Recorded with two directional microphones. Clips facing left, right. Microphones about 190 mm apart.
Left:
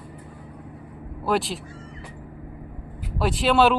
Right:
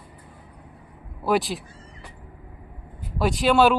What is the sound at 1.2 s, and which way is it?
Speech, centre (ahead or behind).